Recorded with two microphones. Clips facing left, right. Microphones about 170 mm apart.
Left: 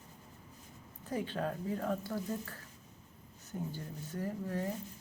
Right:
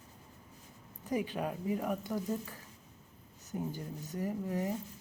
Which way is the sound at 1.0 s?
15° right (ahead or behind).